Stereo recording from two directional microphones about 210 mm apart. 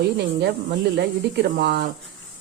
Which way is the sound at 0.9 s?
50° right (ahead or behind).